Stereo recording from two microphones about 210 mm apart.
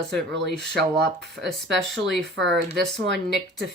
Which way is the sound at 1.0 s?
55° right (ahead or behind).